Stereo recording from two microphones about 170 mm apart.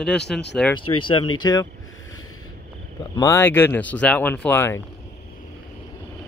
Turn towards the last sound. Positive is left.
turn(degrees=15)  # may be behind; listen again after turning